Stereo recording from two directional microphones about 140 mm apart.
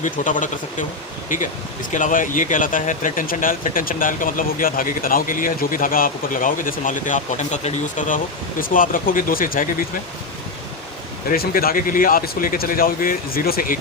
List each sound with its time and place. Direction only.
0.0 s speech: 65° left (ahead or behind); by 9.6 s 85° left
11.3 s a man's voice: 90° left